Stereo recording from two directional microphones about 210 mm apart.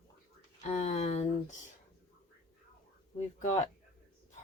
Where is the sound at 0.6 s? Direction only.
35° left (ahead or behind).